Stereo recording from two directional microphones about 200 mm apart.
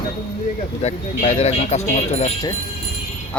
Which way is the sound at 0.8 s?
35° left (ahead or behind).